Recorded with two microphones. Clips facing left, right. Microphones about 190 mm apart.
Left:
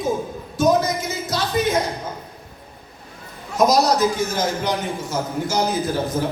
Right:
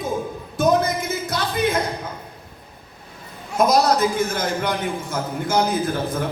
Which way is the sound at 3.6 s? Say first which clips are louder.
Left 1 dB; 55° right (ahead or behind).